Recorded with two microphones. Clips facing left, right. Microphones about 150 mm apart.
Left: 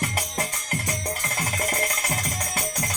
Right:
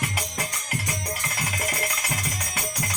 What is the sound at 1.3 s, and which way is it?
Music, 40° left (ahead or behind).